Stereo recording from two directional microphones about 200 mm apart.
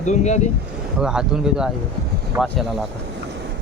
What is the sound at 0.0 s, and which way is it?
Speech, 35° left (ahead or behind).